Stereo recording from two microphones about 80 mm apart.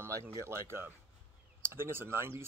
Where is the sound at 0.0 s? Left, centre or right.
Right.